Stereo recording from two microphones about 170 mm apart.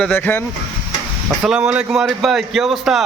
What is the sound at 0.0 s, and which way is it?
Speech, 10° left (ahead or behind).